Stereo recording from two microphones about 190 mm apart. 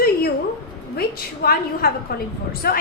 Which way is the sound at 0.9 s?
55° left (ahead or behind).